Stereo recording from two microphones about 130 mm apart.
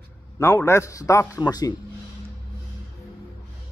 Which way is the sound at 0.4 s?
20° left (ahead or behind).